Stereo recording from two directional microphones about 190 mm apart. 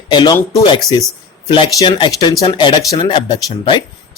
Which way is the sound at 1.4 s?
25° left (ahead or behind).